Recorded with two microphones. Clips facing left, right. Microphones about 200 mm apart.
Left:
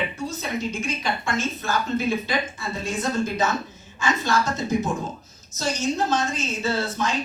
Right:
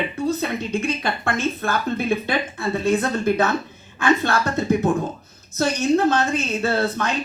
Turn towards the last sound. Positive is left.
turn(degrees=-60)  # may be behind; listen again after turning